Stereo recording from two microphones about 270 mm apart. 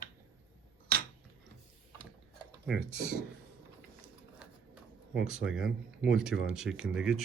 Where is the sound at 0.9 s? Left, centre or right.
Right.